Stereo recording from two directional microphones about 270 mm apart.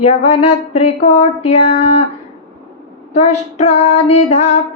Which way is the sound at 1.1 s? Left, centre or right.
Left.